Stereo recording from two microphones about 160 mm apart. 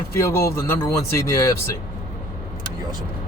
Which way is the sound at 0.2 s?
15° left (ahead or behind).